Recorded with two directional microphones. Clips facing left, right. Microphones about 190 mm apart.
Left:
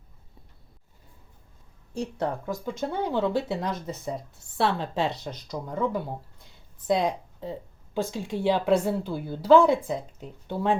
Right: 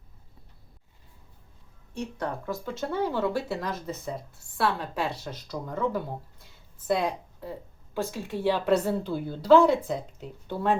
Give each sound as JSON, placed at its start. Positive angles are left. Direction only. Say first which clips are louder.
{"t": 1.9, "sound": "a woman's voice", "louder": "left 3 dB", "side_deg": 30}
{"t": 2.5, "sound": "a woman's voice", "louder": "left 1 dB", "side_deg": 15}